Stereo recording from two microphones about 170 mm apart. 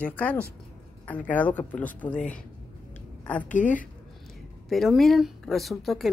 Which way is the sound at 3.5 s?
50° left (ahead or behind).